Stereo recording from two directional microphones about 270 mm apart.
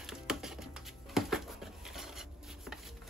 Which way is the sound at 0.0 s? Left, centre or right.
Centre.